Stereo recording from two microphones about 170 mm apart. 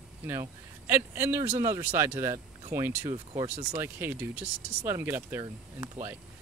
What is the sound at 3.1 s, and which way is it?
Speech, 30° right (ahead or behind).